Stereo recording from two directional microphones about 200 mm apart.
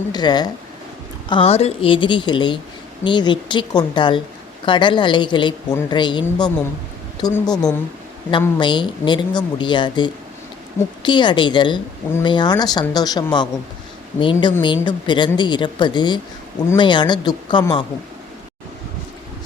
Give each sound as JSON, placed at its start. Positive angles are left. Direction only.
{"t": 0.1, "sound": "speech", "side_deg": 20}